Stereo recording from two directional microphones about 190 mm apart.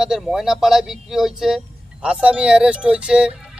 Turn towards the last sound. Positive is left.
turn(degrees=-5)  # may be behind; listen again after turning